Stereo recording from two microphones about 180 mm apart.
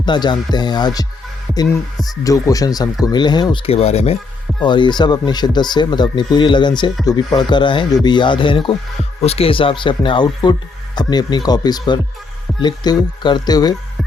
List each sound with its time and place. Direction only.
0.0 s speech: 25° left (ahead or behind)